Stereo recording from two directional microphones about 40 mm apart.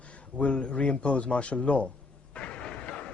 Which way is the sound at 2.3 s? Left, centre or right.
Left.